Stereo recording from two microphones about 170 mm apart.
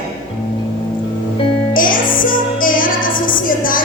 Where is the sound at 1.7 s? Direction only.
55° left (ahead or behind).